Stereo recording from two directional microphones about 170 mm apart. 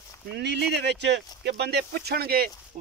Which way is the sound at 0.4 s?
80° right.